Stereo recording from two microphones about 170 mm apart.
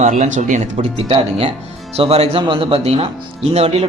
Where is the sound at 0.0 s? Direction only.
45° right (ahead or behind).